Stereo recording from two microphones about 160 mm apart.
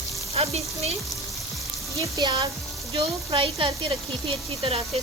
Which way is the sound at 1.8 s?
20° right (ahead or behind).